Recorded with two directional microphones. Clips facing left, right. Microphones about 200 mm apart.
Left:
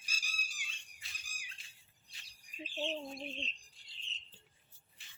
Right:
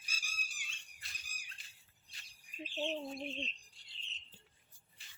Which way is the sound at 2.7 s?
Centre (ahead or behind).